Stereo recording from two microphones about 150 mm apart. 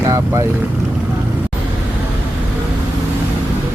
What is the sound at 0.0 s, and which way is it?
Vehicle, 20° right (ahead or behind).